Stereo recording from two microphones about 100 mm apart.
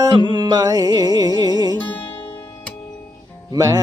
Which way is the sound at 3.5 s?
40° right (ahead or behind).